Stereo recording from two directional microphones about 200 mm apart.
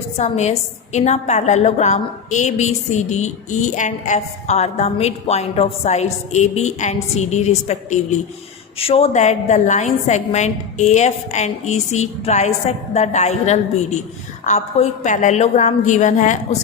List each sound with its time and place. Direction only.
0.2 s a woman's voice: 35° left (ahead or behind)